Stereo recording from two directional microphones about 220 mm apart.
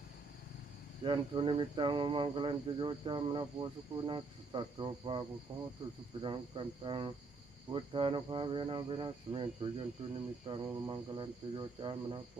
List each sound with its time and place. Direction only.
1.0 s speech: 20° right (ahead or behind)